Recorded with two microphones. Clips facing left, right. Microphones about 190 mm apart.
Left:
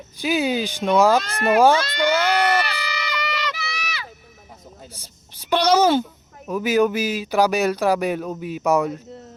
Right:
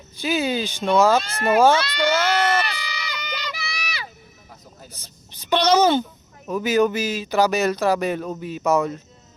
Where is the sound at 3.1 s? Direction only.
90° left.